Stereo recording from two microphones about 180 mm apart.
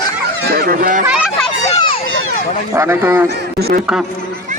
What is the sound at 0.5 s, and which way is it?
Speech, 55° right (ahead or behind).